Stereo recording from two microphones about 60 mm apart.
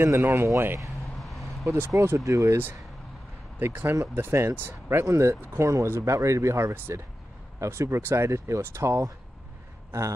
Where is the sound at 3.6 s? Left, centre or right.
Right.